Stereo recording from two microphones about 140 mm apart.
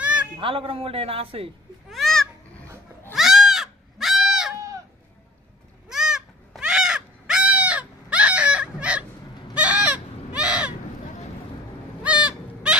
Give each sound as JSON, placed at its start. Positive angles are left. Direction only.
{"t": 0.4, "sound": "speech", "side_deg": -40}
{"t": 1.9, "sound": "a sound", "side_deg": 0}
{"t": 3.2, "sound": "goat", "side_deg": 0}
{"t": 5.9, "sound": "crow", "side_deg": -5}
{"t": 12.0, "sound": "bird", "side_deg": -10}